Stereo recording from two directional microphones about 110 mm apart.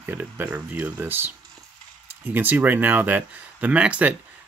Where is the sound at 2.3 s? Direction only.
15° right (ahead or behind).